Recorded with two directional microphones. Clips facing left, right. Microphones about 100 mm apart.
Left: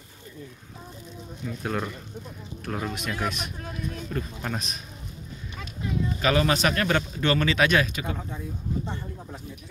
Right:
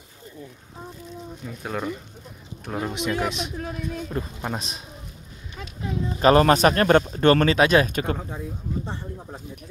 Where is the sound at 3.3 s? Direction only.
90° right.